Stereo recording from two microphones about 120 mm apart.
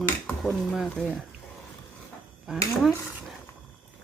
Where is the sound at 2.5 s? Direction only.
5° right (ahead or behind).